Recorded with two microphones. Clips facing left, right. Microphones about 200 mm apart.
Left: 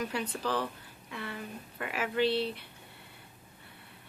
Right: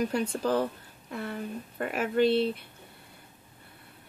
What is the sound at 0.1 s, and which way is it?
A woman's voice, 45° right (ahead or behind).